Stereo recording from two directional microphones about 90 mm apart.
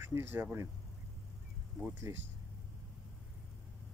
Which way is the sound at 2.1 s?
30° right (ahead or behind).